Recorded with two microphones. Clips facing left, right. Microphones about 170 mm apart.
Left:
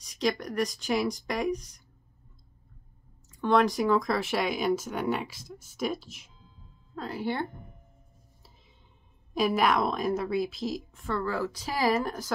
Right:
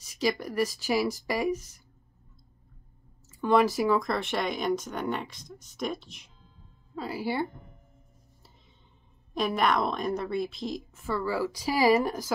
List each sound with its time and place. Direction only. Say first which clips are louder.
0.0 s speech: even; 5° right (ahead or behind)
3.3 s speech: right 1 dB; 5° right (ahead or behind)
9.3 s speech: left 1 dB; 5° left (ahead or behind)